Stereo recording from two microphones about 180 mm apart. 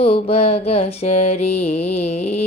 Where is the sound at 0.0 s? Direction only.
35° left (ahead or behind).